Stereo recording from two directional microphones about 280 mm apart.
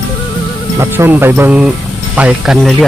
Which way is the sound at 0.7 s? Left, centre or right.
Centre.